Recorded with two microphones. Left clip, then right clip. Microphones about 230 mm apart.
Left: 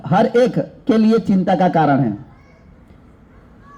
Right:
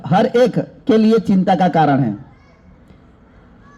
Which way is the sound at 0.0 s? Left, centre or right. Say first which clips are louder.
Right 1 dB; right.